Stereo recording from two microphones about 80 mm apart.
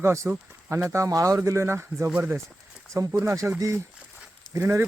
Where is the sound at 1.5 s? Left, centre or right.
Right.